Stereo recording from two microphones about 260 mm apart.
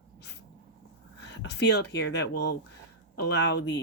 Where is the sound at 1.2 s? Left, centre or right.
Left.